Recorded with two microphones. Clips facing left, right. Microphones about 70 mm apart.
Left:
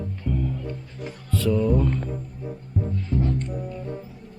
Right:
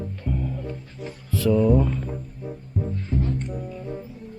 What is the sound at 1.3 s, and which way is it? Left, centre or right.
Speech, centre.